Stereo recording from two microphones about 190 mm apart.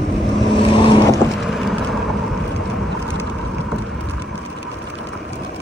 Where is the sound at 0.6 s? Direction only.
25° left (ahead or behind).